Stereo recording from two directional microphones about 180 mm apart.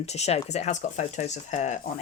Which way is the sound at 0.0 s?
35° left (ahead or behind).